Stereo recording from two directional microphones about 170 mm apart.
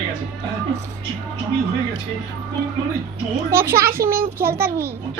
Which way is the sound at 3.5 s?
15° right (ahead or behind).